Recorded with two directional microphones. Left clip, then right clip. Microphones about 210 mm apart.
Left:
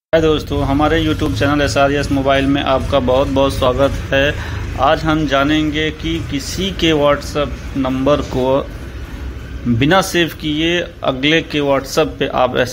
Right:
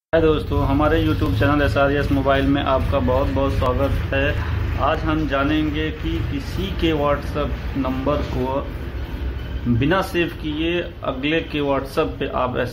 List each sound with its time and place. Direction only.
0.1 s speech: 10° left (ahead or behind)
9.8 s speech: 25° left (ahead or behind)